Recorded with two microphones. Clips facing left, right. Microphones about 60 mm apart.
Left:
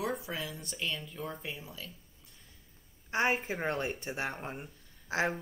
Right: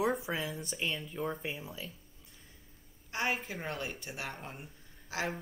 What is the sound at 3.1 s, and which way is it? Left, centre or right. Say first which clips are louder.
Speech: left 4 dB; left.